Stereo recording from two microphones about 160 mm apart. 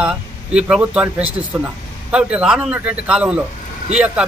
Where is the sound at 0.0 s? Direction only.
5° right (ahead or behind).